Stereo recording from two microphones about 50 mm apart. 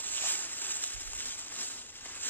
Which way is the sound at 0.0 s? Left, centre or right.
Left.